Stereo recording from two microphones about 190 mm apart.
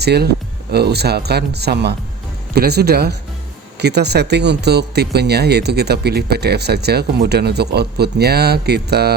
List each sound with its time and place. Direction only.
0.0 s speech: 60° right (ahead or behind)